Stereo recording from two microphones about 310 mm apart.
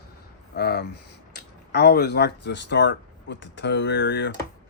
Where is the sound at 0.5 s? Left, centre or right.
Left.